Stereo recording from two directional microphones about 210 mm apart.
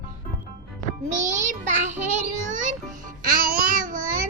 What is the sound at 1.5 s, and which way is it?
Child singing, 35° right (ahead or behind).